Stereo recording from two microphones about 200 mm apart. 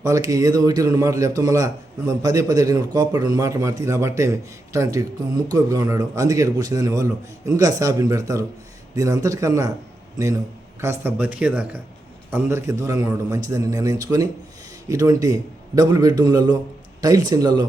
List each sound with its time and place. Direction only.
0.0 s a man's voice: 15° right (ahead or behind)
10.8 s a man's voice: 15° right (ahead or behind)